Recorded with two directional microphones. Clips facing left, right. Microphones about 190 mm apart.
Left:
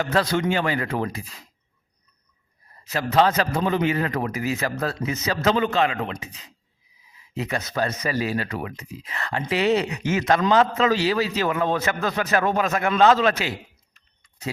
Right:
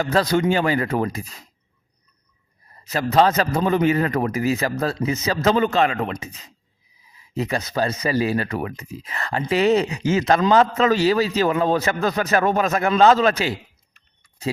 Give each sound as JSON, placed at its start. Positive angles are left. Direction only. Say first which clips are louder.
{"t": 0.0, "sound": "speech", "louder": "right 3 dB", "side_deg": -35}
{"t": 2.9, "sound": "speech", "louder": "right 2 dB", "side_deg": -40}
{"t": 7.3, "sound": "speech", "louder": "right 3 dB", "side_deg": -35}